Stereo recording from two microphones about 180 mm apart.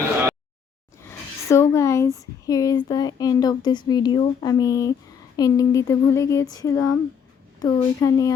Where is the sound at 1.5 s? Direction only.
15° left (ahead or behind).